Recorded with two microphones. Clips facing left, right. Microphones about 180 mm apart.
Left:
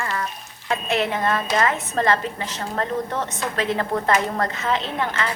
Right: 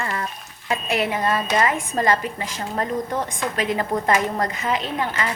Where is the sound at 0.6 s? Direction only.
10° right (ahead or behind).